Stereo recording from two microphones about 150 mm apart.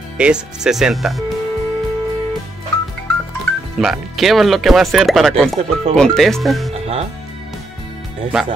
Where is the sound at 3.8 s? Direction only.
Centre (ahead or behind).